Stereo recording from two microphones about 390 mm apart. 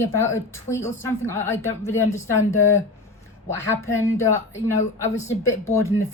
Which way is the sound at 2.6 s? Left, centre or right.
Left.